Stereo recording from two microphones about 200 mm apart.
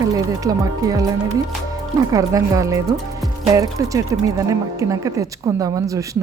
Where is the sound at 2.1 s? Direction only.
15° right (ahead or behind).